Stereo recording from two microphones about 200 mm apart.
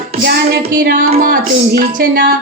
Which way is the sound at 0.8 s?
50° right (ahead or behind).